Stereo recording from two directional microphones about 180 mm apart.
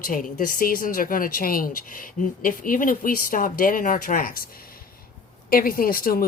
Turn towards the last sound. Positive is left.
turn(degrees=55)  # may be behind; listen again after turning